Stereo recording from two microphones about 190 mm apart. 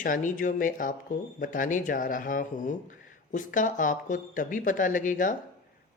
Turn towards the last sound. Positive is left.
turn(degrees=45)  # may be behind; listen again after turning